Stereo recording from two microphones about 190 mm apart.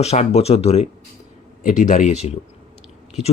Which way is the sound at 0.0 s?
35° left (ahead or behind).